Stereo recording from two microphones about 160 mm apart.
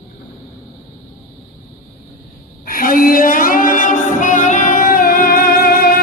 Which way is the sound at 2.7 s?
60° left (ahead or behind).